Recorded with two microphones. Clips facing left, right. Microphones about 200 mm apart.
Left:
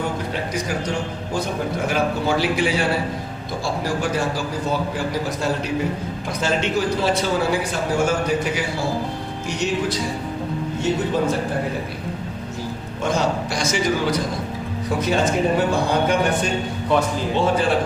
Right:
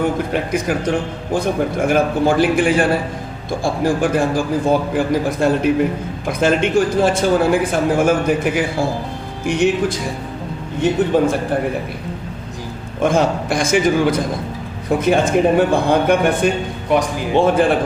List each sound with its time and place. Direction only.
0.5 s a man's voice: 55° right (ahead or behind)
11.1 s a man's voice: 55° right (ahead or behind)
13.0 s a man's voice: 55° right (ahead or behind)
16.9 s speech: 15° right (ahead or behind)
17.3 s a man's voice: 55° right (ahead or behind)